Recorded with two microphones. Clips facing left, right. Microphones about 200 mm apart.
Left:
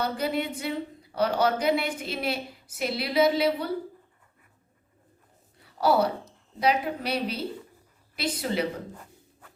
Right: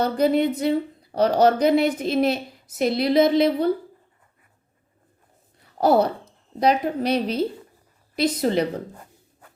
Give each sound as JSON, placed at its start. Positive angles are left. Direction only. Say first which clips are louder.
{"t": 0.0, "sound": "a woman's voice", "louder": "right 9 dB", "side_deg": -40}
{"t": 5.7, "sound": "a woman's voice", "louder": "right 5 dB", "side_deg": -45}